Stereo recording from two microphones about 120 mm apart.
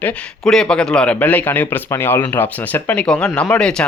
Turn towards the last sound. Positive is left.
turn(degrees=5)  # may be behind; listen again after turning